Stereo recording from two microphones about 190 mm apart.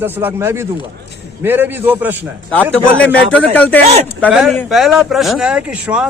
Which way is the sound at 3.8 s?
35° right (ahead or behind).